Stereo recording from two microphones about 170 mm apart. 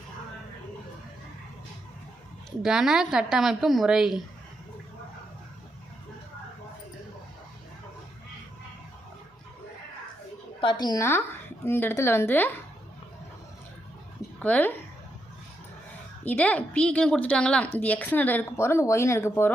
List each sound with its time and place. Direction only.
2.6 s a woman's voice: 5° right (ahead or behind)
10.6 s a woman's voice: 25° left (ahead or behind)
14.2 s a sound: 10° left (ahead or behind)
16.2 s speech: 10° left (ahead or behind)